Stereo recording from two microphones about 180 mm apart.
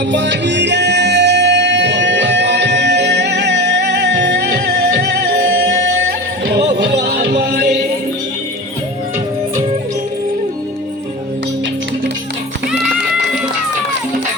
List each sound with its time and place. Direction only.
0.1 s music: 80° right; by 7.7 s 60° right (ahead or behind)